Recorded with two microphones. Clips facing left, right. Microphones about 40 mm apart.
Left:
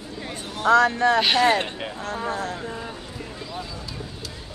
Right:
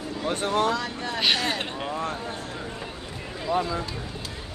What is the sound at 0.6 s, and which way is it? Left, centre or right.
Speech, left.